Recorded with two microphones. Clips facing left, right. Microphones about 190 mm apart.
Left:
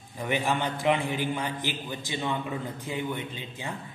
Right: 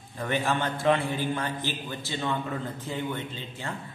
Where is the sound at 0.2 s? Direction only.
15° left (ahead or behind).